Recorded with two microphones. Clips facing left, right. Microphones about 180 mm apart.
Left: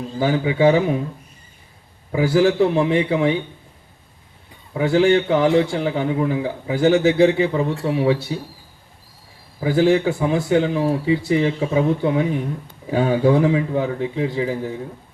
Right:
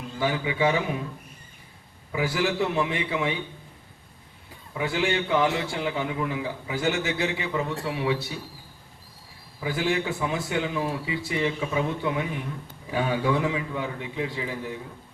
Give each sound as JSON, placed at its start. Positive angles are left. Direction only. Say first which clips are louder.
{"t": 0.2, "sound": "a man's voice", "louder": "left 8 dB", "side_deg": 35}
{"t": 2.1, "sound": "a man's voice", "louder": "left 9 dB", "side_deg": 30}
{"t": 4.7, "sound": "a man's voice", "louder": "left 10 dB", "side_deg": 35}
{"t": 9.6, "sound": "a man's voice", "louder": "left 10 dB", "side_deg": 35}